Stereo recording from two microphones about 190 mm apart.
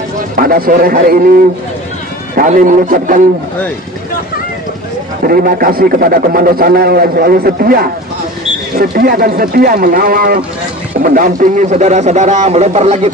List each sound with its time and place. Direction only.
0.4 s a man's voice: 50° right (ahead or behind)
2.3 s a man's voice: 45° right (ahead or behind)
5.2 s a man's voice: 50° right (ahead or behind); by 13.1 s 35° right (ahead or behind)